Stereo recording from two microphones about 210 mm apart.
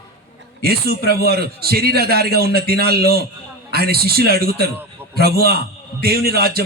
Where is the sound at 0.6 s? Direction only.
45° right (ahead or behind).